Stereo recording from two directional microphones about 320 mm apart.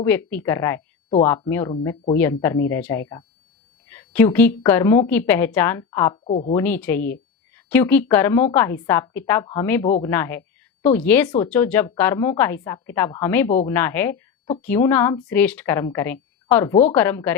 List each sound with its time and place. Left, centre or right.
0.0 s a woman's voice: centre
6.3 s a woman's voice: left
6.6 s a woman's voice: centre